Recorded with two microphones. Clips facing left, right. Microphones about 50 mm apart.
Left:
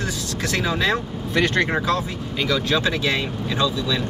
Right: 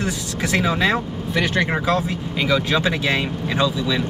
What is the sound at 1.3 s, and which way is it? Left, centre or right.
Speech, centre.